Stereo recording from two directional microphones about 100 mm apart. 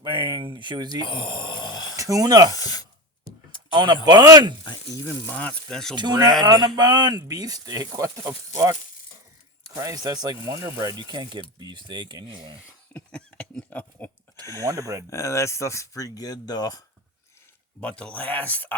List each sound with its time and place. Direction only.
0.0 s speech: 50° right (ahead or behind)
1.0 s speech: 55° left (ahead or behind)
2.0 s speech: 35° right (ahead or behind)
2.5 s speech: 40° left (ahead or behind)
3.7 s speech: 45° right (ahead or behind)
5.0 s speech: 15° left (ahead or behind)
5.7 s speech: 5° left (ahead or behind)
6.0 s speech: 45° right (ahead or behind)
9.7 s speech: 35° right (ahead or behind)
12.9 s a sound: 10° left (ahead or behind)
14.6 s speech: 35° right (ahead or behind)
15.1 s speech: 30° left (ahead or behind)
17.7 s speech: 10° left (ahead or behind)